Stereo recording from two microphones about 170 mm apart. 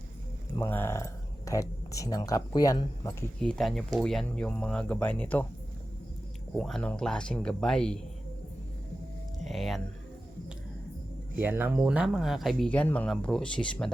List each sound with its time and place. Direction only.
0.5 s speech: 15° left (ahead or behind)
3.4 s speech: centre (ahead or behind)
6.5 s speech: 5° left (ahead or behind)
9.4 s a sound: centre (ahead or behind)
11.3 s speech: 10° right (ahead or behind); by 13.9 s 5° left (ahead or behind)